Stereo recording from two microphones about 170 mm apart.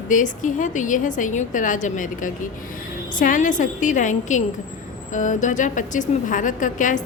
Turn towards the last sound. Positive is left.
turn(degrees=50)  # may be behind; listen again after turning